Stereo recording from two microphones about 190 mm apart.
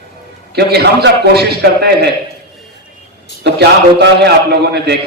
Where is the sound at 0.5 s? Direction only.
60° right (ahead or behind).